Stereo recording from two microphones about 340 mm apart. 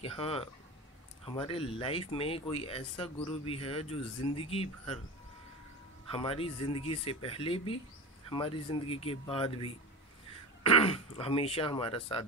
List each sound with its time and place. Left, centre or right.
0.0 s speech: centre
6.0 s speech: centre